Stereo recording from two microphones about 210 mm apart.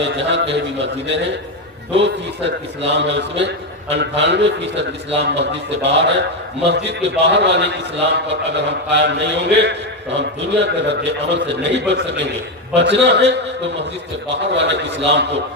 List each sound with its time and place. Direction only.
0.0 s a man's voice: 55° right (ahead or behind)